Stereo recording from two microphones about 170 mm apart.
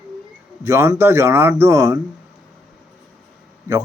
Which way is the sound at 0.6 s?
15° right (ahead or behind).